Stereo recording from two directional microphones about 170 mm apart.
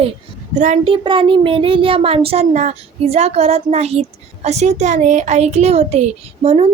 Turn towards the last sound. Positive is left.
turn(degrees=-40)  # may be behind; listen again after turning